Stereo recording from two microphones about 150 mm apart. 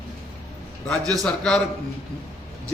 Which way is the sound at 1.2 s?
5° left (ahead or behind).